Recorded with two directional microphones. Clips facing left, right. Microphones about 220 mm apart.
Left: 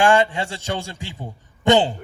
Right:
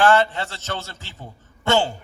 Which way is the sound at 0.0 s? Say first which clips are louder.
Left 1 dB; 15° left (ahead or behind).